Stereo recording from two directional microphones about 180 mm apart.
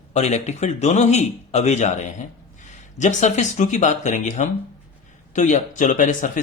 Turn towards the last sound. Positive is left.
turn(degrees=45)  # may be behind; listen again after turning